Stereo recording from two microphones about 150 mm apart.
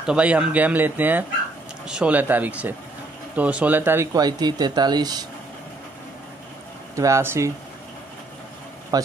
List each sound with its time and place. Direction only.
0.0 s speech: 5° right (ahead or behind); by 5.2 s 30° right (ahead or behind)
7.0 s speech: 20° right (ahead or behind)
8.9 s speech: 25° right (ahead or behind)